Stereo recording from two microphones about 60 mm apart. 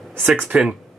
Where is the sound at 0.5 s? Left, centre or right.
Right.